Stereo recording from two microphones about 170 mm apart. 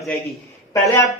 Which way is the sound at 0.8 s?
20° left (ahead or behind).